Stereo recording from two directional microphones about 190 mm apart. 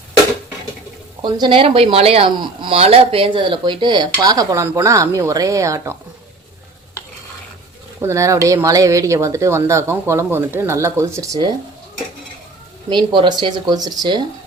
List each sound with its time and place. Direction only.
1.2 s speech: 25° right (ahead or behind)
7.9 s speech: 15° right (ahead or behind)
12.9 s speech: 25° right (ahead or behind)